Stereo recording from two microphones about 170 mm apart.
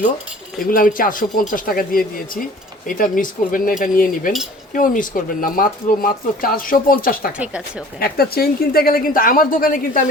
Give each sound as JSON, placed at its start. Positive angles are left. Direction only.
{"t": 0.6, "sound": "speech", "side_deg": 55}
{"t": 7.3, "sound": "speech", "side_deg": -5}
{"t": 7.9, "sound": "speech", "side_deg": 60}